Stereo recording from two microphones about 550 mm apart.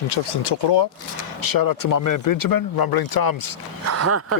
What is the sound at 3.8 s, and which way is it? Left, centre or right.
Speech, right.